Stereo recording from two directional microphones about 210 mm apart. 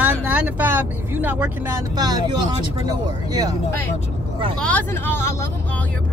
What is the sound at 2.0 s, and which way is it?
Speech, 20° right (ahead or behind).